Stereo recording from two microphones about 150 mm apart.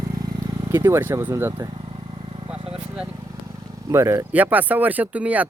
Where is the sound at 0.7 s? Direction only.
15° right (ahead or behind).